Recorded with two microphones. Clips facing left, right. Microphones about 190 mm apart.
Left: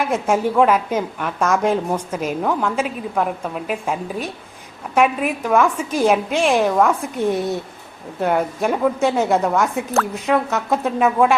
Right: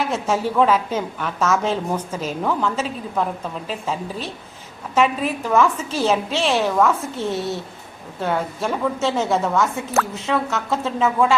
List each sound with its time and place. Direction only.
0.1 s a woman's voice: 10° left (ahead or behind)